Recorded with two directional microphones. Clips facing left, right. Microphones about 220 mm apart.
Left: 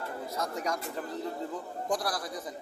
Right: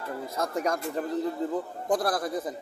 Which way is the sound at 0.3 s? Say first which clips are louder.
Right 5 dB; 55° right (ahead or behind).